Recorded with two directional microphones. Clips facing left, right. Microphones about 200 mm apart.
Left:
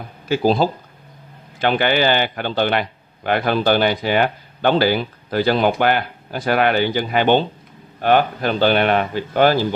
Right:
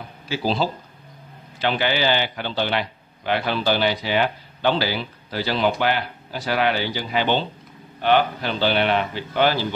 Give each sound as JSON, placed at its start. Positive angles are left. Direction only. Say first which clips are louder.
{"t": 0.3, "sound": "speech", "louder": "left 6 dB", "side_deg": 50}